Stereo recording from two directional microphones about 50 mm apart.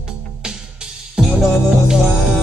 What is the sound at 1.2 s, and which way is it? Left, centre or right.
Music, centre.